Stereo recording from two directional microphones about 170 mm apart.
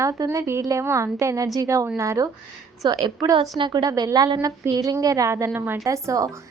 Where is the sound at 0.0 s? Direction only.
15° right (ahead or behind).